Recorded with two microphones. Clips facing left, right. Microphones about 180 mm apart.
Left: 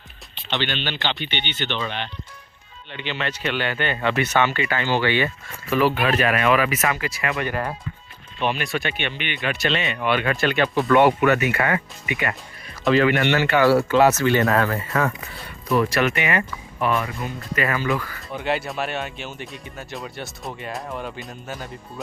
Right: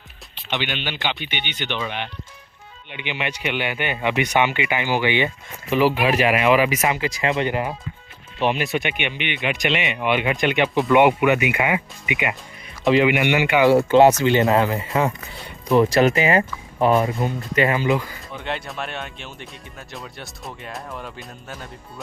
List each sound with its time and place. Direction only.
0.5 s speech: 15° right (ahead or behind)
18.3 s speech: 5° left (ahead or behind)